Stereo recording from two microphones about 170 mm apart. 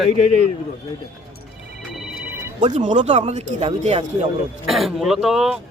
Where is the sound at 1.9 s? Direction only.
Centre (ahead or behind).